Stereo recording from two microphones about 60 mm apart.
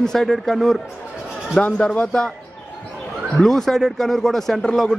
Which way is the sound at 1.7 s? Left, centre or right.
Centre.